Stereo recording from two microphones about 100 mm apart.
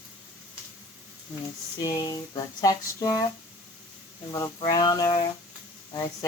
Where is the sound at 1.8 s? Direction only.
40° left (ahead or behind).